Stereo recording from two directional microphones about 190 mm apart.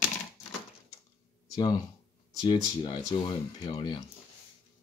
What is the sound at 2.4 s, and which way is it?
Speech, 25° left (ahead or behind).